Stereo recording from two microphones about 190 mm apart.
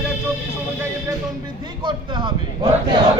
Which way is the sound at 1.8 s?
25° right (ahead or behind).